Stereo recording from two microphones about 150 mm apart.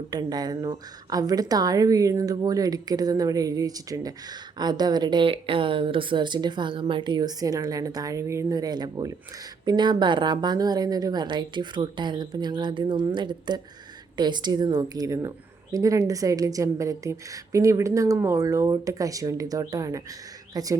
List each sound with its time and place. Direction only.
0.1 s a woman's voice: 25° right (ahead or behind)